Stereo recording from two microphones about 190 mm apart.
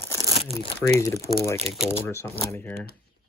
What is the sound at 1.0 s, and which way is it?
Speech, 15° left (ahead or behind).